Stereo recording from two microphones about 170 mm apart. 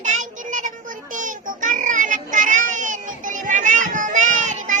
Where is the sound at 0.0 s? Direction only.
45° right (ahead or behind).